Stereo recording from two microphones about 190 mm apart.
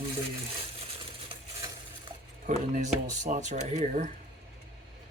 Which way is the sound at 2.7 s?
40° right (ahead or behind).